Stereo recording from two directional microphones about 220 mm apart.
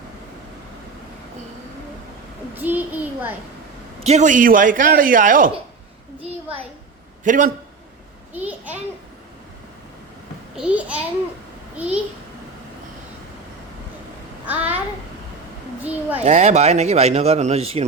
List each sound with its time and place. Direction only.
2.6 s a child's voice: 10° right (ahead or behind)
4.0 s a man's voice: 30° right (ahead or behind)
6.2 s a man's voice: 25° right (ahead or behind)
8.3 s a sound: 10° right (ahead or behind)
10.5 s a child's voice: 5° right (ahead or behind)
14.4 s a child's voice: 5° right (ahead or behind)
15.8 s a child's voice: 5° right (ahead or behind)
16.2 s a man's voice: 30° right (ahead or behind)